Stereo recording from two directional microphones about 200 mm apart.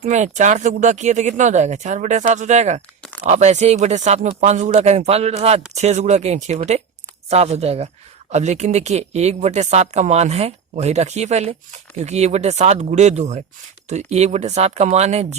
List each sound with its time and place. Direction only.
0.0 s speech: 35° right (ahead or behind)